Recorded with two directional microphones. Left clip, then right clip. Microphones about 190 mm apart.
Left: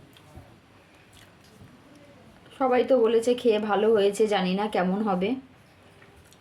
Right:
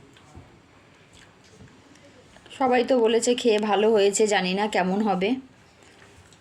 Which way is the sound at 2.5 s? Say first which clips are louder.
Right 1 dB; 20° right (ahead or behind).